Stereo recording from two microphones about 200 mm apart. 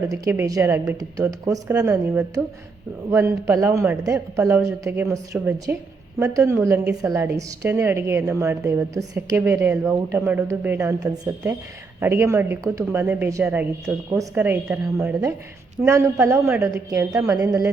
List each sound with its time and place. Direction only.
0.1 s a woman's voice: 15° right (ahead or behind)
3.1 s a woman's voice: 15° right (ahead or behind)